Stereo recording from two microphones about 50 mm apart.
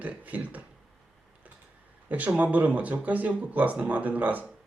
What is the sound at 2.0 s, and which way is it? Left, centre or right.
Speech, right.